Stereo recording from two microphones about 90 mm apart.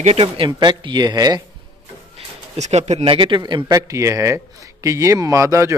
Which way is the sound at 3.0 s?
85° right.